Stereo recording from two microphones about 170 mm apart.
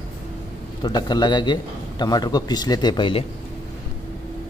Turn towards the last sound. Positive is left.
turn(degrees=30)  # may be behind; listen again after turning